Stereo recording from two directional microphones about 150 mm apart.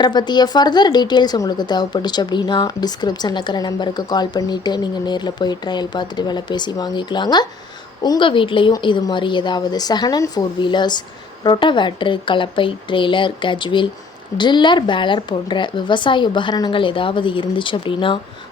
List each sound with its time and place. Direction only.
0.0 s a woman's voice: 30° left (ahead or behind)